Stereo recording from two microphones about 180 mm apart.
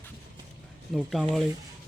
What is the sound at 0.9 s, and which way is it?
Speech, centre (ahead or behind).